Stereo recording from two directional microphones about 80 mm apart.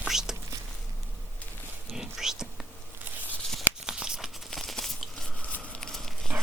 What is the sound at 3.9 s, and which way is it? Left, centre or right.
Tearing, centre.